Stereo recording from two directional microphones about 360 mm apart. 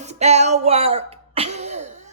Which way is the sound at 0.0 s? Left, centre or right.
Centre.